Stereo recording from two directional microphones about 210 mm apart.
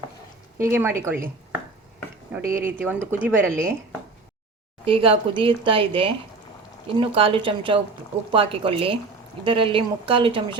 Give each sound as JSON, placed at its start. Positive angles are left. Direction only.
{"t": 0.6, "sound": "speech", "side_deg": -10}
{"t": 2.5, "sound": "speech", "side_deg": -10}
{"t": 4.9, "sound": "speech", "side_deg": -25}